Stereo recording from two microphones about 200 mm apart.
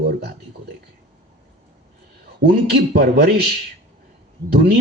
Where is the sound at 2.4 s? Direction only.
55° right (ahead or behind).